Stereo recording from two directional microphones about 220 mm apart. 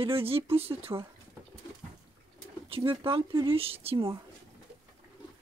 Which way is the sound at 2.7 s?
20° right (ahead or behind).